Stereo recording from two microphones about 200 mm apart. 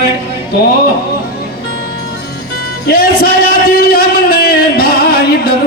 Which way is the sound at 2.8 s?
50° left (ahead or behind).